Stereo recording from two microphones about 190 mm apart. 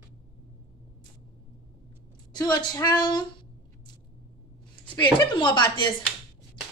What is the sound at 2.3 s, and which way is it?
Speech, 20° left (ahead or behind).